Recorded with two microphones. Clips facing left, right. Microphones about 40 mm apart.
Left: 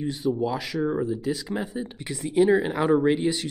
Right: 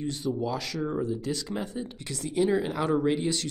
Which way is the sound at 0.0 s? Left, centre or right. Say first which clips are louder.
Left 4 dB; centre.